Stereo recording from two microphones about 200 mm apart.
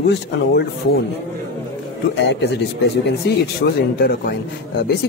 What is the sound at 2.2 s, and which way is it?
Speech, 60° left (ahead or behind).